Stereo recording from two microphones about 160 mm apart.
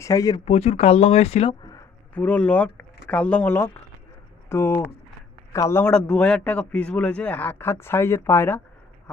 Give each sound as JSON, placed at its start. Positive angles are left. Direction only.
{"t": 0.0, "sound": "speech", "side_deg": 20}
{"t": 0.4, "sound": "speech", "side_deg": 45}
{"t": 2.1, "sound": "a man's voice", "side_deg": 10}